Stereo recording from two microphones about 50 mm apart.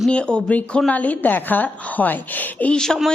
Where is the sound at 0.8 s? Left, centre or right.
Left.